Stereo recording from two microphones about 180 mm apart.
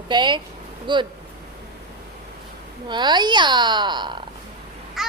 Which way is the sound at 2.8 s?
25° right (ahead or behind).